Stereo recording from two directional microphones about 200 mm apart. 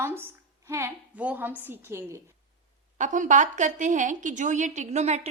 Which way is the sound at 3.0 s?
40° right (ahead or behind).